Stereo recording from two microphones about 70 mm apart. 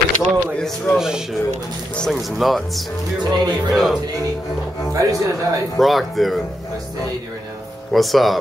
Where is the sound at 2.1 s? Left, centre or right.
Centre.